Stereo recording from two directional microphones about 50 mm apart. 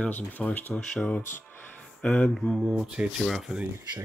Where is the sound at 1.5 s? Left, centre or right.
Left.